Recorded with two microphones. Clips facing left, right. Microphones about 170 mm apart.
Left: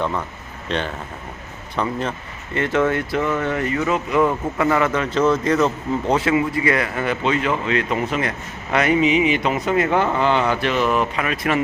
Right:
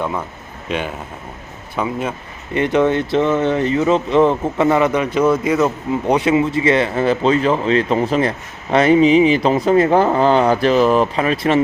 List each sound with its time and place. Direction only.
0.7 s speech: 10° right (ahead or behind)
2.6 s speech: 20° right (ahead or behind)